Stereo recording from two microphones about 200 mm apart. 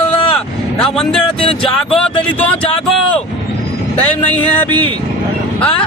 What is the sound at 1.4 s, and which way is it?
Speech, 25° left (ahead or behind).